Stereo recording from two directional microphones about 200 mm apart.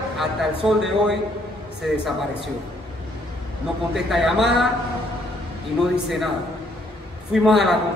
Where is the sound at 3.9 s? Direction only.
Centre (ahead or behind).